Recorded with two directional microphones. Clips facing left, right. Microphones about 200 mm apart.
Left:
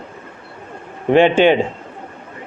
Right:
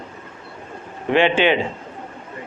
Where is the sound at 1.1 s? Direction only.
45° left (ahead or behind).